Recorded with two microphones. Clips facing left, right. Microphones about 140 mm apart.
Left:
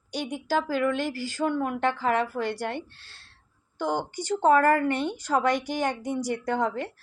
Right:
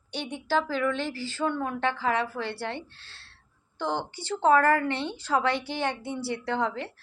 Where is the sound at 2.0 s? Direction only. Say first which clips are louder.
Left 2 dB; 45° left (ahead or behind).